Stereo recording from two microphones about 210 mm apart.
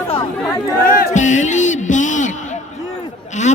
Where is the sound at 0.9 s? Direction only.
40° left (ahead or behind).